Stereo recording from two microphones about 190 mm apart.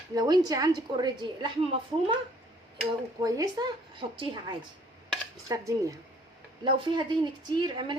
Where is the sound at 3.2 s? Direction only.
20° right (ahead or behind).